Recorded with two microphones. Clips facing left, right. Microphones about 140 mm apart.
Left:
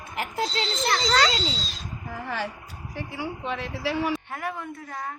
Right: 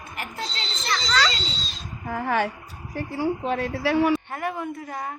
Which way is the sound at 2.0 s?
70° right (ahead or behind).